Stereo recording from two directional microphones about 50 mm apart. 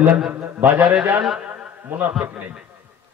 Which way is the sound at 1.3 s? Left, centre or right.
Right.